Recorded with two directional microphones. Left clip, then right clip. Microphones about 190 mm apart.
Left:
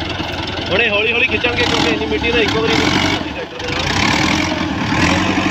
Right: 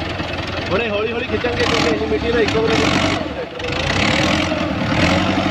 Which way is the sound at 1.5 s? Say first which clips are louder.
Left 2 dB; 25° right (ahead or behind).